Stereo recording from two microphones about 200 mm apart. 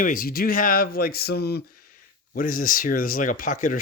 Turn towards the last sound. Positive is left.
turn(degrees=40)  # may be behind; listen again after turning